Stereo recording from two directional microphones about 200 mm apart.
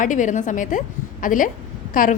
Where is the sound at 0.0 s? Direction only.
40° left (ahead or behind).